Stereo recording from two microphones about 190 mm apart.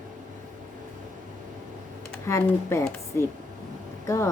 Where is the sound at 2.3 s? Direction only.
15° left (ahead or behind).